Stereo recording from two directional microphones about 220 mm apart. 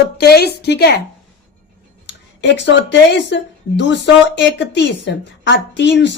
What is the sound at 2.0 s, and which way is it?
A woman's voice, 55° left (ahead or behind).